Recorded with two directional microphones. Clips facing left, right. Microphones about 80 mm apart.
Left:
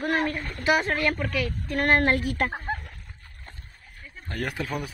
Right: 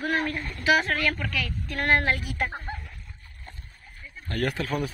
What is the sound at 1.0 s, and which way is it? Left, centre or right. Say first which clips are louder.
Speech: left 2 dB; left.